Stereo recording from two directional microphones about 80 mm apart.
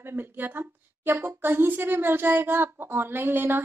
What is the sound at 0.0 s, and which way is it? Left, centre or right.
A woman's voice, right.